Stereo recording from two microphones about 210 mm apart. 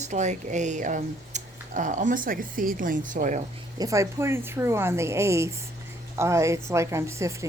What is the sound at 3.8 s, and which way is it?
A woman's voice, 15° right (ahead or behind).